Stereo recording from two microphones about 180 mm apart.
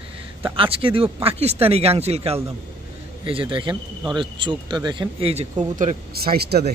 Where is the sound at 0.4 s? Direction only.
30° right (ahead or behind).